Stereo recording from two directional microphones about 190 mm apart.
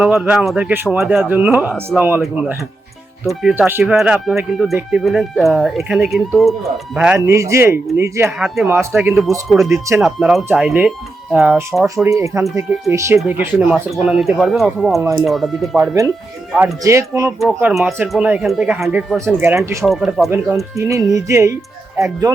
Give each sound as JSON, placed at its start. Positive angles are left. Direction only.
{"t": 0.0, "sound": "speech", "side_deg": -5}
{"t": 7.2, "sound": "speech", "side_deg": -15}
{"t": 8.4, "sound": "speech", "side_deg": 0}
{"t": 8.6, "sound": "speech", "side_deg": -10}
{"t": 10.0, "sound": "speech", "side_deg": 0}
{"t": 12.0, "sound": "speech", "side_deg": -15}
{"t": 15.8, "sound": "speech", "side_deg": -15}
{"t": 17.4, "sound": "speech", "side_deg": -5}
{"t": 19.8, "sound": "speech", "side_deg": 0}
{"t": 20.7, "sound": "speech", "side_deg": -15}